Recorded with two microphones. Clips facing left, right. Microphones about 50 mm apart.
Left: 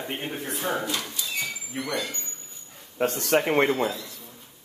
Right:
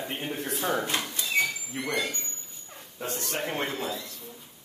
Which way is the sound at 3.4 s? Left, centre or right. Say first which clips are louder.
Left 9 dB; left.